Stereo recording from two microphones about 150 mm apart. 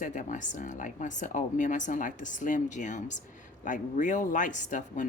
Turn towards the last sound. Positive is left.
turn(degrees=55)  # may be behind; listen again after turning